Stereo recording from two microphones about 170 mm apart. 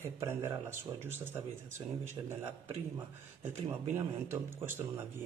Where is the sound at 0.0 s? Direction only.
15° right (ahead or behind).